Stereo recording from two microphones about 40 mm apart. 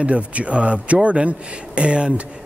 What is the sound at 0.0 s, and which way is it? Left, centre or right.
A man's voice, right.